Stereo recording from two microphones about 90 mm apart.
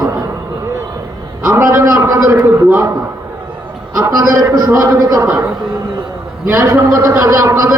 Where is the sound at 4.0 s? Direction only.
40° right (ahead or behind).